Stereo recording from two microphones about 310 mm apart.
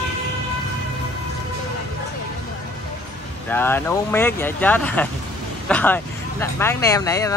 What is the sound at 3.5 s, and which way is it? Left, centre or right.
Speech, centre.